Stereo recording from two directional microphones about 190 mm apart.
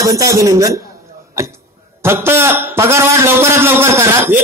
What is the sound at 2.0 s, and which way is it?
A man's voice, 15° right (ahead or behind).